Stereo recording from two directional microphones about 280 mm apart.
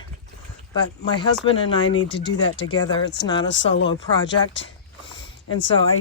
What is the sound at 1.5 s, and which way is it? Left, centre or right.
Speech, centre.